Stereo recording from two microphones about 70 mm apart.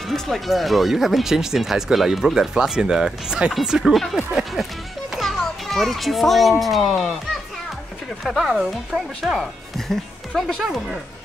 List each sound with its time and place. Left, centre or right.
0.1 s speech: centre
5.2 s children playing: centre
6.6 s speech: centre
8.2 s speech: centre